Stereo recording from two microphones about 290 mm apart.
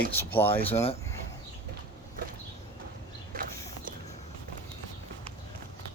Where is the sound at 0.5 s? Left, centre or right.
Centre.